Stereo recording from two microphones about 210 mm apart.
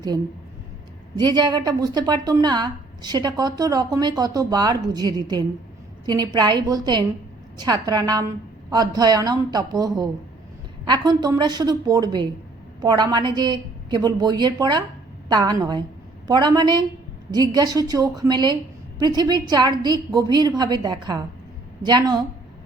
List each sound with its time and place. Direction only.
1.2 s a woman's voice: 20° right (ahead or behind)